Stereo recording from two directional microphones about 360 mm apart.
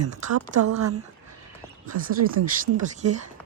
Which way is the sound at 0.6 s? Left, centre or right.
Right.